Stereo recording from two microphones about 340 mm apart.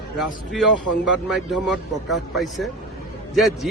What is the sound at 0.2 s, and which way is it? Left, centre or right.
A man's voice, centre.